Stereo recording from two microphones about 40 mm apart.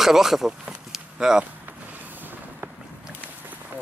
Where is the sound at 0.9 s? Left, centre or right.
Centre.